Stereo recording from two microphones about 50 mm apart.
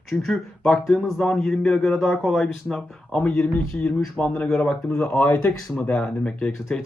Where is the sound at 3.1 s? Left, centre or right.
Centre.